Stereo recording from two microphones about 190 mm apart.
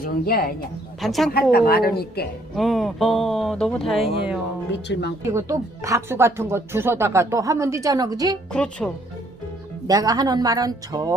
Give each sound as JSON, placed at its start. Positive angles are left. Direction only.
{"t": 0.0, "sound": "a woman's voice", "side_deg": 50}
{"t": 1.0, "sound": "speech", "side_deg": 0}
{"t": 1.3, "sound": "a woman's voice", "side_deg": 50}
{"t": 2.6, "sound": "speech", "side_deg": 0}
{"t": 4.9, "sound": "speech", "side_deg": 65}
{"t": 5.3, "sound": "speech", "side_deg": -15}
{"t": 8.5, "sound": "speech", "side_deg": 5}
{"t": 9.8, "sound": "speech", "side_deg": -20}